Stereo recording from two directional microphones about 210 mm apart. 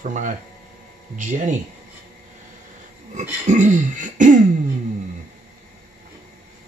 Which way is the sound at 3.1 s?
35° right (ahead or behind).